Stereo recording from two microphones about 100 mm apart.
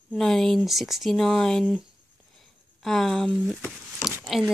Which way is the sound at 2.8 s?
5° left (ahead or behind).